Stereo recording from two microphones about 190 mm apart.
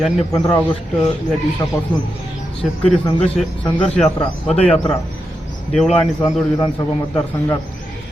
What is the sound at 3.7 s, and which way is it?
Speech, 25° left (ahead or behind).